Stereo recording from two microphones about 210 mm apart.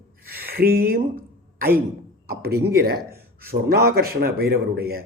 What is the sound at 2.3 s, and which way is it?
Speech, 45° right (ahead or behind).